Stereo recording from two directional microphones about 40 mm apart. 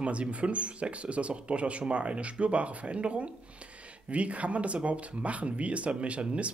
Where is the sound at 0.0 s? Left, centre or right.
Right.